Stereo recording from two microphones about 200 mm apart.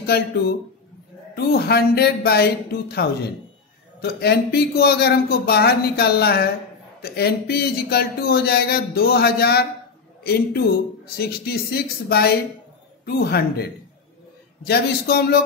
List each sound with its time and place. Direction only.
0.0 s a man's voice: 50° left (ahead or behind)